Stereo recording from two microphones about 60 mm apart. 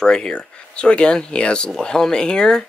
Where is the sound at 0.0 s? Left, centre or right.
Centre.